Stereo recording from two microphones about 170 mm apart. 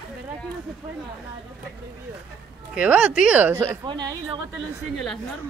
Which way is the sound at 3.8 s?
25° right (ahead or behind).